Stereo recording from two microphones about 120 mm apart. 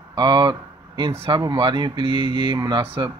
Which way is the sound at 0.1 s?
35° right (ahead or behind).